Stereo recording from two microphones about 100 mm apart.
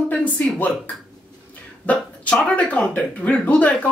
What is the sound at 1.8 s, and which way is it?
Speech, 15° left (ahead or behind).